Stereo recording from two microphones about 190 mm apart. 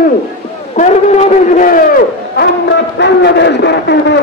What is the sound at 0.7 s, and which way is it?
A man's voice, 40° left (ahead or behind).